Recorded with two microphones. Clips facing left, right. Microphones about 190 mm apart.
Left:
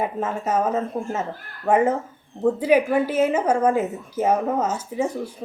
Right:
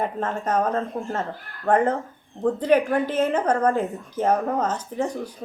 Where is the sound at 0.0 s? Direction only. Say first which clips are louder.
Left 1 dB; 10° left (ahead or behind).